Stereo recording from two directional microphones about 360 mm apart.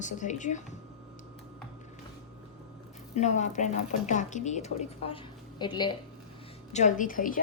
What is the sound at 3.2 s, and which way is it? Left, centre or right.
A woman's voice, centre.